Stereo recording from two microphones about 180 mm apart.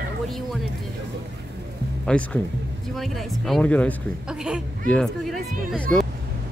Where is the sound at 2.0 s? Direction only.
5° left (ahead or behind).